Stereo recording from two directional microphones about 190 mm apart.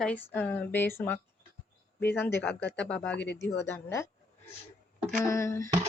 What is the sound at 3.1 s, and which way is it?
Speech, 65° left (ahead or behind).